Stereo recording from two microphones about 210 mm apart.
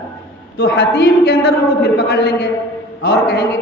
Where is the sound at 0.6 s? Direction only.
50° left (ahead or behind).